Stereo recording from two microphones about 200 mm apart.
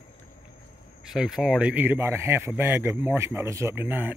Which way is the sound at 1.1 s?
Centre (ahead or behind).